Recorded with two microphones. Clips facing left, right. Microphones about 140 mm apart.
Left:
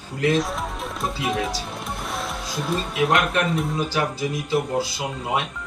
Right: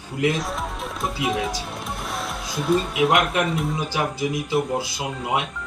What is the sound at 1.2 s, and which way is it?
Speech, centre (ahead or behind).